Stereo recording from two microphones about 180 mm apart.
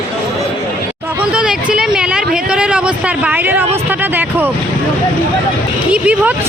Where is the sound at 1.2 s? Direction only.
5° right (ahead or behind).